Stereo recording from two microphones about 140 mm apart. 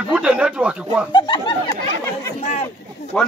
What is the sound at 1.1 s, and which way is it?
Speech, 30° left (ahead or behind).